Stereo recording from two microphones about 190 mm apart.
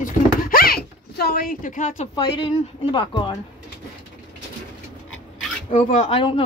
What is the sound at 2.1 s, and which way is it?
Speech, 25° left (ahead or behind).